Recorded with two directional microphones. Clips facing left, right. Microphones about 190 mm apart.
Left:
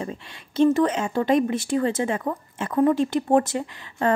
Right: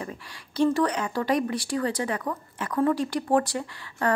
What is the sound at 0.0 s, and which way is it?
A woman's voice, 25° left (ahead or behind).